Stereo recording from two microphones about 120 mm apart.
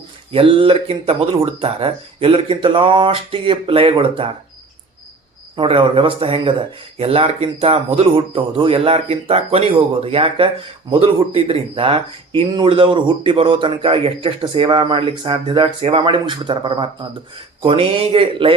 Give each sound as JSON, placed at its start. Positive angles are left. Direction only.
{"t": 0.3, "sound": "speech", "side_deg": -50}
{"t": 5.5, "sound": "speech", "side_deg": -50}